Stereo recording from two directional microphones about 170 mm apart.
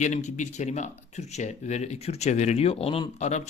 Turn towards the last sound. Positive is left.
turn(degrees=45)  # may be behind; listen again after turning